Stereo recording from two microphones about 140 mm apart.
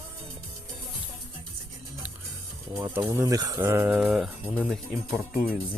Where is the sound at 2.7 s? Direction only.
20° right (ahead or behind).